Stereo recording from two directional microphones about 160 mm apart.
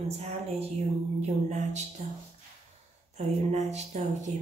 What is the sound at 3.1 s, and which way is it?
Speech, 45° right (ahead or behind).